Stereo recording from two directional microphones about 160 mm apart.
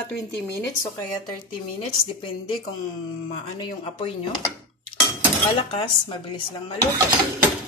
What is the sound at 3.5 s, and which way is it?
Speech, 35° left (ahead or behind).